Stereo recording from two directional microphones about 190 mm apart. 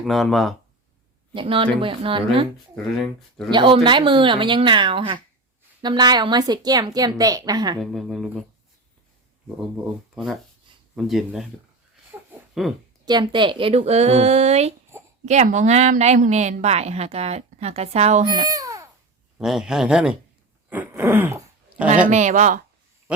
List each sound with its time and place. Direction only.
0.0 s speech: centre (ahead or behind)
1.3 s a woman's voice: 25° right (ahead or behind)
3.0 s speech: centre (ahead or behind)
3.5 s a woman's voice: 25° right (ahead or behind)
7.8 s speech: centre (ahead or behind)
9.6 s speech: centre (ahead or behind)
12.6 s speech: centre (ahead or behind)
13.1 s a woman's voice: 25° right (ahead or behind)
18.3 s speech: 20° right (ahead or behind)
19.4 s speech: 5° right (ahead or behind)
20.7 s a sound: 10° right (ahead or behind)
22.0 s a woman's voice: 40° right (ahead or behind)